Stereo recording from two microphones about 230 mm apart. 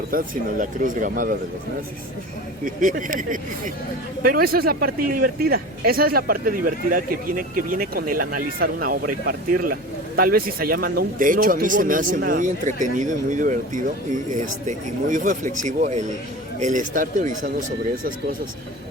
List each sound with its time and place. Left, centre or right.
0.1 s a man's voice: right
2.6 s a man's voice: right